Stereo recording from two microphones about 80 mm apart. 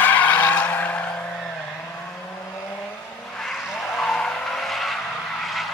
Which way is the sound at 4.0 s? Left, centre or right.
Centre.